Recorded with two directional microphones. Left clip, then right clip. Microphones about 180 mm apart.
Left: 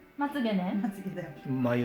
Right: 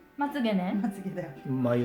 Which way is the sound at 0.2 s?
5° right (ahead or behind).